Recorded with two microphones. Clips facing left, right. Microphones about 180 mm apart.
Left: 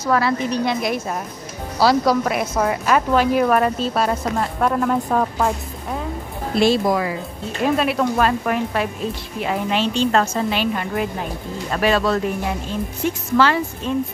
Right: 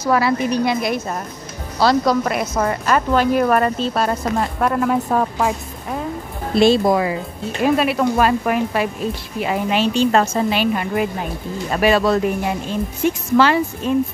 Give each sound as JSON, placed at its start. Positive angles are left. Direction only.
{"t": 0.0, "sound": "a woman's voice", "side_deg": -10}
{"t": 1.8, "sound": "speech", "side_deg": 5}
{"t": 6.6, "sound": "speech", "side_deg": -25}
{"t": 7.6, "sound": "a woman's voice", "side_deg": -5}